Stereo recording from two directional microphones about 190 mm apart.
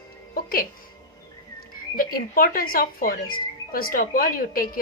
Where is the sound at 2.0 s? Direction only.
50° left (ahead or behind).